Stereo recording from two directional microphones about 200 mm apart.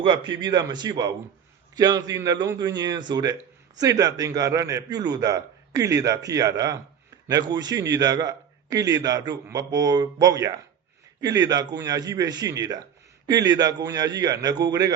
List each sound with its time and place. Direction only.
0.3 s a man's voice: 20° right (ahead or behind)